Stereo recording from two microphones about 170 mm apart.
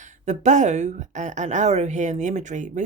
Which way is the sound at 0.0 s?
45° right (ahead or behind).